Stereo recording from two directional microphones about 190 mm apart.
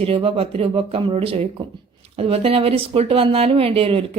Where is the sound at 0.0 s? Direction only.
30° right (ahead or behind).